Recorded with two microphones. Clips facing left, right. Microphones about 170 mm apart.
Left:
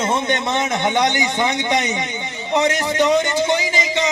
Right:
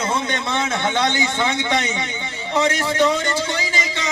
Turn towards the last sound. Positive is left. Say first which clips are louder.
# left 5 dB
turn(degrees=20)  # may be behind; listen again after turning